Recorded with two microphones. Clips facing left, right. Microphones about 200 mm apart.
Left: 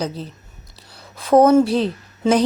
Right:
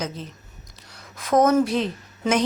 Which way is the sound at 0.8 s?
30° left (ahead or behind).